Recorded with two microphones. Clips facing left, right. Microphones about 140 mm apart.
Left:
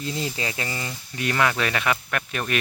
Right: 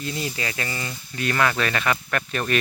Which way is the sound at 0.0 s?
25° left (ahead or behind).